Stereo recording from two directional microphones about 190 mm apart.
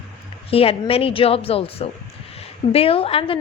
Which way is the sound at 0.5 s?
30° left (ahead or behind).